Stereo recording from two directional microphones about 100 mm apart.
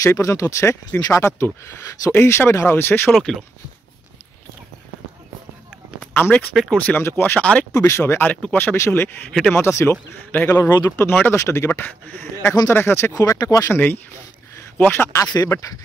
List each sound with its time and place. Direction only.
0.0 s speech: 30° left (ahead or behind)
3.1 s speech: centre (ahead or behind)
5.9 s a sound: 15° left (ahead or behind)
6.5 s speech: centre (ahead or behind)
7.0 s speech: 25° left (ahead or behind)
7.7 s speech: 30° left (ahead or behind)
9.3 s speech: 5° left (ahead or behind)
9.6 s speech: 25° left (ahead or behind)
13.1 s speech: 35° left (ahead or behind)
13.7 s speech: 20° left (ahead or behind)
15.1 s speech: 35° left (ahead or behind)